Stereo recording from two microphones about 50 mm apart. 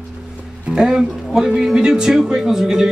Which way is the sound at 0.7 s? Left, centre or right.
Centre.